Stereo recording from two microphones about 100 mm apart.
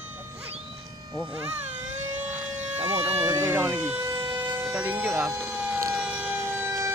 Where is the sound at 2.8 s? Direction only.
90° right.